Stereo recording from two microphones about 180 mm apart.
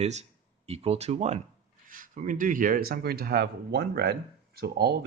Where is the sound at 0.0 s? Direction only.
40° right (ahead or behind).